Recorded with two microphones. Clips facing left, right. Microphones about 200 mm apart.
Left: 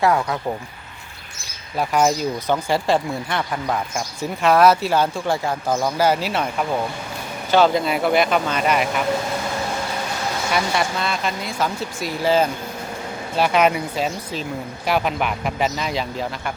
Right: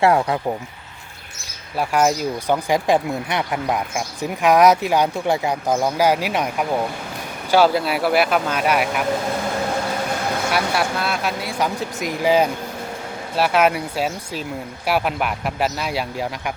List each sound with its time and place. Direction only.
0.0 s speech: 30° right (ahead or behind)
1.8 s speech: 5° right (ahead or behind)
10.5 s speech: 5° right (ahead or behind)